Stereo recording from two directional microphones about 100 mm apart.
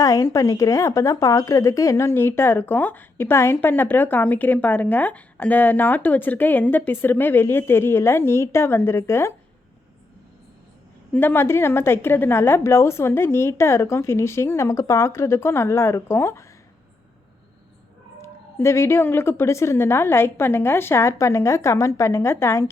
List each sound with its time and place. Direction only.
0.0 s a woman's voice: 35° left (ahead or behind)
11.1 s a woman's voice: 20° left (ahead or behind)
18.2 s a woman's voice: 25° left (ahead or behind)